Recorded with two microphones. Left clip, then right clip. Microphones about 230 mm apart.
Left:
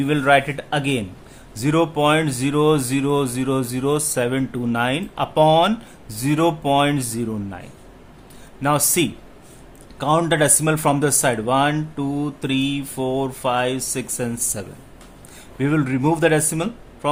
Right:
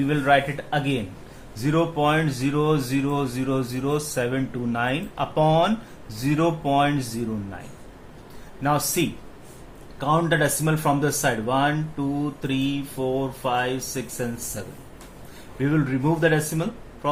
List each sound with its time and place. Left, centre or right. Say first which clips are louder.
0.0 s speech: left 3 dB; left
8.6 s speech: left 4 dB; left